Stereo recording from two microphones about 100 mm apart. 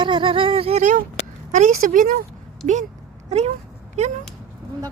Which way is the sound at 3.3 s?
90° right.